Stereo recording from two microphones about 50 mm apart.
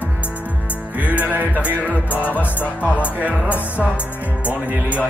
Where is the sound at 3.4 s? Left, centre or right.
Left.